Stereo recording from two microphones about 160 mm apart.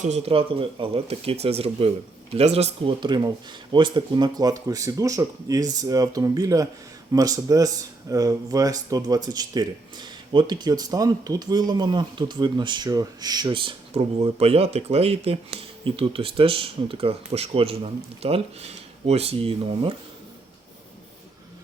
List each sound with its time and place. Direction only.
0.0 s speech: 40° right (ahead or behind)
3.0 s speech: 25° right (ahead or behind)